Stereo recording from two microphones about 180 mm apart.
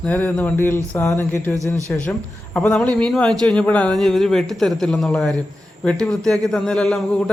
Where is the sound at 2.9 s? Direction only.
5° left (ahead or behind).